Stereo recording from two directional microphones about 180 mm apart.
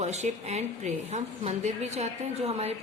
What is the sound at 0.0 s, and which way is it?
A woman's voice, 40° right (ahead or behind).